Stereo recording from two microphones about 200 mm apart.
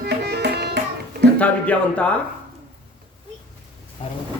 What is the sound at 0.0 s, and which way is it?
Music, 55° right (ahead or behind).